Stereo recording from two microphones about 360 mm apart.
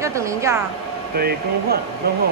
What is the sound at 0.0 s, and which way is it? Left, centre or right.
Speech, centre.